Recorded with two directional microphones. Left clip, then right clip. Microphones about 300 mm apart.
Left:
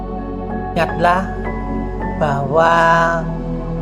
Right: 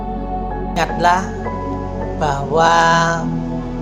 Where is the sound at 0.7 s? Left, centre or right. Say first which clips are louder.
Even; left.